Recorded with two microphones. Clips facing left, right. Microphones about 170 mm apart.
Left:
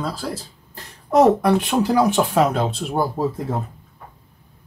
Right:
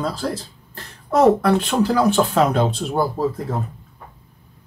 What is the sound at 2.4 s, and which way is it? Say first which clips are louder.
Speech: right 2 dB; centre (ahead or behind).